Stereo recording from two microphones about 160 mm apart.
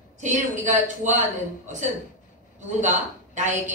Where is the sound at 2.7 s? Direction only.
50° right (ahead or behind).